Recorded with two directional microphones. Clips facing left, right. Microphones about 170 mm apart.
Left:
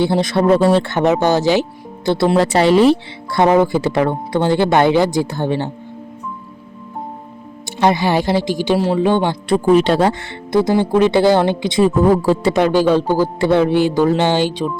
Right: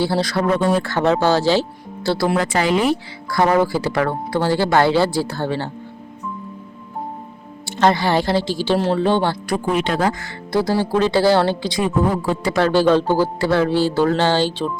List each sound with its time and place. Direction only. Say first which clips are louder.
0.0 s speech: left 4 dB; 20° left (ahead or behind)
7.8 s speech: left 1 dB; 15° left (ahead or behind)
9.7 s speech: left 6 dB; 30° left (ahead or behind)
11.8 s speech: left 7 dB; 35° left (ahead or behind)
12.5 s speech: right 2 dB; 15° left (ahead or behind)